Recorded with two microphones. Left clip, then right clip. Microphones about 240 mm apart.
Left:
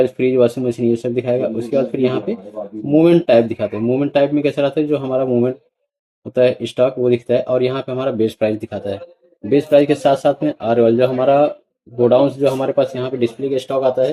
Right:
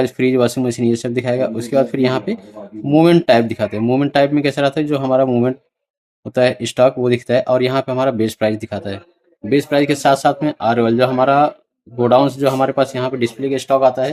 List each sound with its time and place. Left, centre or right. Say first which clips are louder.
0.0 s speech: left 1 dB; right